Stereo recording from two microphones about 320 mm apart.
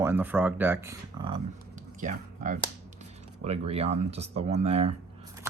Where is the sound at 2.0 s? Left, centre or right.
Right.